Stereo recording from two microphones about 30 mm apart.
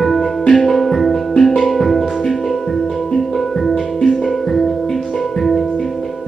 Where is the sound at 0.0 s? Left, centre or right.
Centre.